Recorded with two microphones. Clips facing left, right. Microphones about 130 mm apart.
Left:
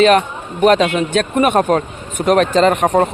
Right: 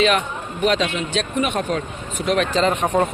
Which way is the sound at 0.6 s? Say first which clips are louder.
Left 8 dB; 45° left (ahead or behind).